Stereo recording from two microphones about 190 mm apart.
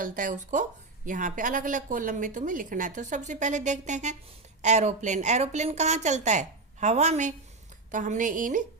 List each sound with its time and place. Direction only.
0.0 s a woman's voice: 45° right (ahead or behind)